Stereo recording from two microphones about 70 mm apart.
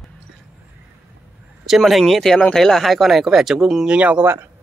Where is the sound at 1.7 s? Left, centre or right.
Centre.